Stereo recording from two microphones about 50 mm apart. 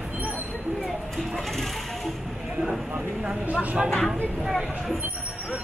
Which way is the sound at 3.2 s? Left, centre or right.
Right.